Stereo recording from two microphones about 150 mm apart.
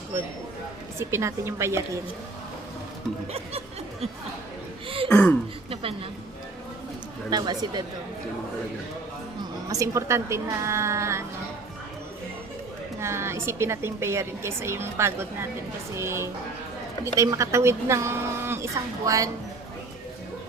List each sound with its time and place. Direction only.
0.9 s a woman's voice: 15° right (ahead or behind)
5.1 s speech: 10° left (ahead or behind)
5.7 s a woman's voice: 40° right (ahead or behind)
7.3 s a woman's voice: 25° right (ahead or behind)
9.4 s a woman's voice: 20° right (ahead or behind)
13.0 s a woman's voice: 15° right (ahead or behind)